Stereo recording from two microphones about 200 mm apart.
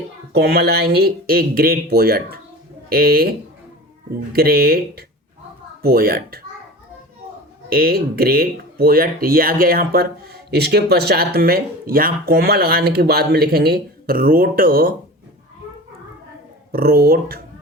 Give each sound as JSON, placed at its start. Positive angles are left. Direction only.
{"t": 0.3, "sound": "speech", "side_deg": -50}
{"t": 7.7, "sound": "speech", "side_deg": -50}
{"t": 16.7, "sound": "speech", "side_deg": -50}